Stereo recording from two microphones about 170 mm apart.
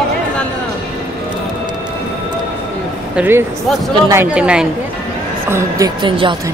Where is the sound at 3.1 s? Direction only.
10° right (ahead or behind).